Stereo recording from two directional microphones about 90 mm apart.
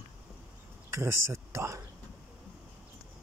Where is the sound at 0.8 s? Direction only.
30° right (ahead or behind).